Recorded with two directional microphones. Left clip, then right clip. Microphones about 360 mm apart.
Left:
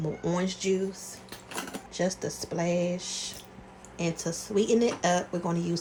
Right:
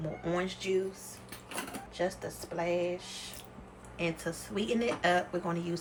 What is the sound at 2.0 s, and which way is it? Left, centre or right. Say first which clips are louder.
Speech: left 4 dB; centre.